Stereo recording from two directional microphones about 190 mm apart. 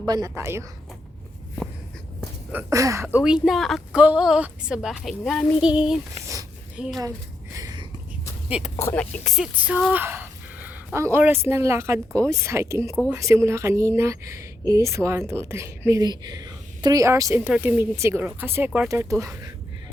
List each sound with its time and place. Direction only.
0.0 s speech: 15° right (ahead or behind)
2.5 s speech: 15° right (ahead or behind)
3.2 s a woman's voice: 5° right (ahead or behind)
7.5 s a sound: 20° right (ahead or behind)
8.4 s speech: 5° right (ahead or behind)
8.8 s speech: 10° left (ahead or behind); by 19.5 s 15° right (ahead or behind)